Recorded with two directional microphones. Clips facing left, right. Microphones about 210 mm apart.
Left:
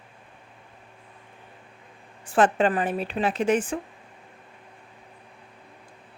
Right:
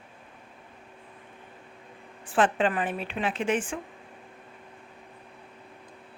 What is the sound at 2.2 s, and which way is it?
Speech, 40° left (ahead or behind).